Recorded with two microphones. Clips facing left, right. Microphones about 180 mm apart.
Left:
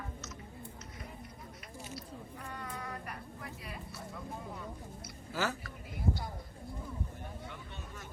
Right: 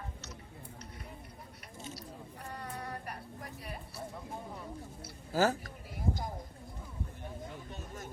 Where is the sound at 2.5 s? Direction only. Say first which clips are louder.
Right 2 dB; 35° right (ahead or behind).